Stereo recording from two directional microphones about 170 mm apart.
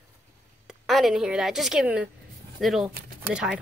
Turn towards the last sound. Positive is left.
turn(degrees=-5)  # may be behind; listen again after turning